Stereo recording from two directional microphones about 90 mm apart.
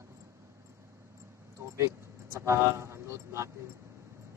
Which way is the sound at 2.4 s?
30° right (ahead or behind).